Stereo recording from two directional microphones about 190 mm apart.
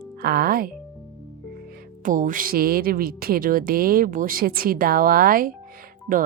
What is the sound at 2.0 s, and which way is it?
Speech, 45° right (ahead or behind).